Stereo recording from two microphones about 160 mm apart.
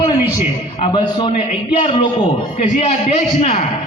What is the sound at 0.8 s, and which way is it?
Speech, 35° left (ahead or behind).